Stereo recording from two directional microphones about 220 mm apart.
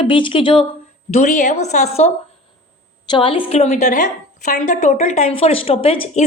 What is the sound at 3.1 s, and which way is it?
A woman's voice, 25° left (ahead or behind).